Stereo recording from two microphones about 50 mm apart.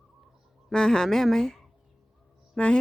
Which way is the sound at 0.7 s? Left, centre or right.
Centre.